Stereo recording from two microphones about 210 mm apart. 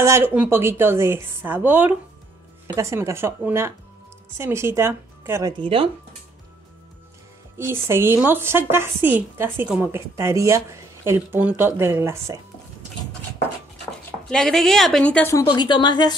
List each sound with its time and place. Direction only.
0.0 s speech: 10° right (ahead or behind)
5.6 s speech: 25° right (ahead or behind)
7.5 s speech: 10° right (ahead or behind)
14.3 s a woman's voice: 5° left (ahead or behind); by 16.2 s 20° left (ahead or behind)